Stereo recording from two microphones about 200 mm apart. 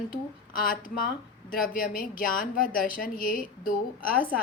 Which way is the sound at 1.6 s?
45° left (ahead or behind).